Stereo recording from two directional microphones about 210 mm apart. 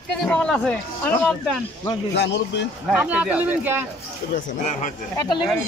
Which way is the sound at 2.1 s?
55° left (ahead or behind).